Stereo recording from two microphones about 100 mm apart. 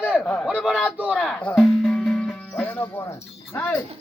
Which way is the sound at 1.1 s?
5° left (ahead or behind).